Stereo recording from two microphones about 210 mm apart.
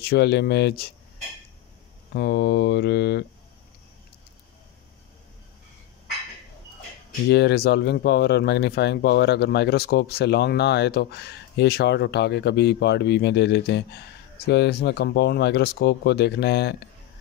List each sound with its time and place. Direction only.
0.0 s speech: 50° left (ahead or behind)
2.1 s speech: 50° left (ahead or behind)
7.2 s speech: 50° left (ahead or behind)